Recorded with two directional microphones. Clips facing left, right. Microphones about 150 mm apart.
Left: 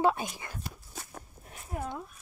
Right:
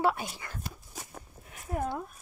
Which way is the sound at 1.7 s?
50° right (ahead or behind).